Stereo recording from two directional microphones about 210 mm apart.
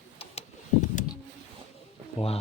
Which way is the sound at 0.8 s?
35° left (ahead or behind).